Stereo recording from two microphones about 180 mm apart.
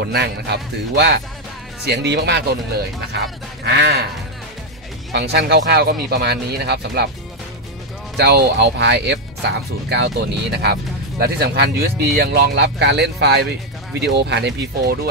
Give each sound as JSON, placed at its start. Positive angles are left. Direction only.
{"t": 0.1, "sound": "speech", "side_deg": -70}
{"t": 3.6, "sound": "speech", "side_deg": -70}
{"t": 5.1, "sound": "speech", "side_deg": -65}
{"t": 8.2, "sound": "speech", "side_deg": -65}